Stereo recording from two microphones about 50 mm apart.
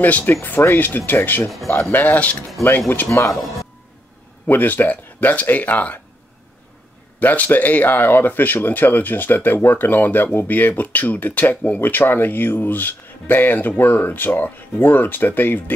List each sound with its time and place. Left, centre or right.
0.0 s speech: left
3.1 s speech: left
4.5 s speech: left
7.2 s speech: left
11.8 s speech: left